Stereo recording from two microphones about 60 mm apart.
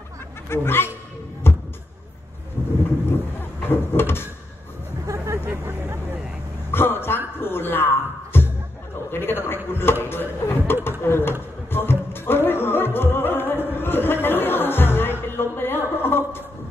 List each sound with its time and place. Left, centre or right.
0.5 s speech: left
1.5 s music: left
3.1 s vehicle: left
5.0 s vehicle: right
5.4 s vehicle: right
6.7 s a sound: left
7.3 s music: left
9.1 s a sound: left
11.7 s music: left